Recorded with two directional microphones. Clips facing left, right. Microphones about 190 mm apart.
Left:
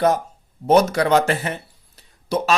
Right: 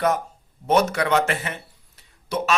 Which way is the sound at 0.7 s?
35° left (ahead or behind).